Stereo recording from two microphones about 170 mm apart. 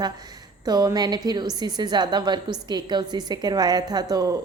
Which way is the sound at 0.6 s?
20° right (ahead or behind).